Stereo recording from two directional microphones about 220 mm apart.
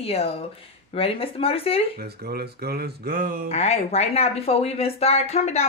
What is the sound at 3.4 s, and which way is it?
Speech, 30° left (ahead or behind).